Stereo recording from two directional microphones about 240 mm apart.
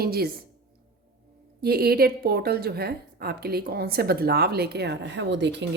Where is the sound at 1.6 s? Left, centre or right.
Right.